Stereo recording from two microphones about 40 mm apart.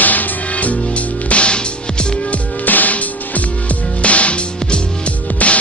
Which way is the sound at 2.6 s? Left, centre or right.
Left.